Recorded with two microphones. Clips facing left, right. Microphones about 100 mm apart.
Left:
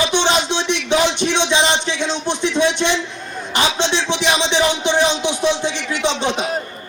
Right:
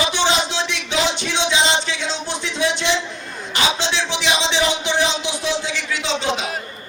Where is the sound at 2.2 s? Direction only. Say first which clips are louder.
Left 6 dB; 20° left (ahead or behind).